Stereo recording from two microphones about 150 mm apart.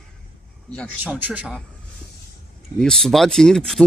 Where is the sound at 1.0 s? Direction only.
10° right (ahead or behind).